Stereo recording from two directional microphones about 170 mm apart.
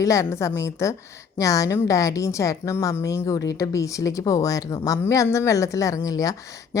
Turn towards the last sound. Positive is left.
turn(degrees=20)  # may be behind; listen again after turning